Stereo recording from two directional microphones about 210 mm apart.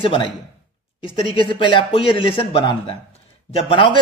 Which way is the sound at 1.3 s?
25° left (ahead or behind).